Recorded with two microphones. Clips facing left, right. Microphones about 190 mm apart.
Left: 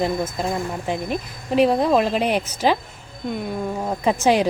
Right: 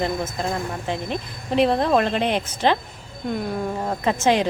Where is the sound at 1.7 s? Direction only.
10° left (ahead or behind).